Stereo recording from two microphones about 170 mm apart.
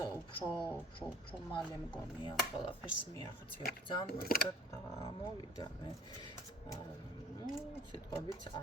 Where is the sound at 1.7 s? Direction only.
25° left (ahead or behind).